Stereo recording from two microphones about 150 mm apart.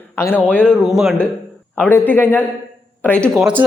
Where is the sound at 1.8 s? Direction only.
10° left (ahead or behind).